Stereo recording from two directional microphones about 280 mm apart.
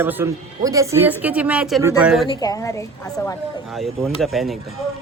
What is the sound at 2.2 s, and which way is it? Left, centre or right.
A woman's voice, centre.